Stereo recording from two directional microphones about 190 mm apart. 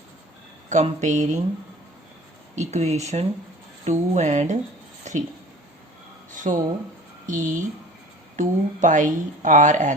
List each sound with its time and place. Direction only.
0.7 s a woman's voice: 40° right (ahead or behind)
2.6 s a woman's voice: 35° right (ahead or behind)
5.1 s a sound: 40° right (ahead or behind)
6.5 s a woman's voice: 35° right (ahead or behind)